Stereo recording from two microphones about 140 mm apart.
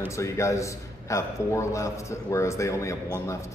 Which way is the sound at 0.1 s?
20° left (ahead or behind).